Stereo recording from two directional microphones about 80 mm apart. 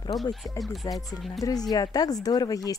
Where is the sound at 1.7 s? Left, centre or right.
Left.